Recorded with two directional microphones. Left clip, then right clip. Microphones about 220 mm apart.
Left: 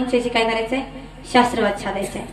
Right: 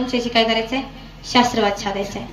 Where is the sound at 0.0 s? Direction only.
40° right (ahead or behind).